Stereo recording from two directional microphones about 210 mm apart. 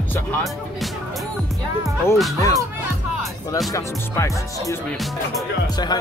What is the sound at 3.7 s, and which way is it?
Speech, 15° left (ahead or behind).